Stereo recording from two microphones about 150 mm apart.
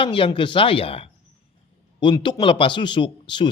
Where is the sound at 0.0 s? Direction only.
35° left (ahead or behind).